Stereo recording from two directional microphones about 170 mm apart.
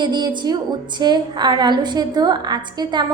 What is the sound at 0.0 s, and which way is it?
A woman's voice, 25° right (ahead or behind).